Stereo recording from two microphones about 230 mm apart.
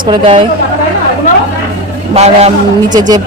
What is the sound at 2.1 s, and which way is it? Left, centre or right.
Speech, right.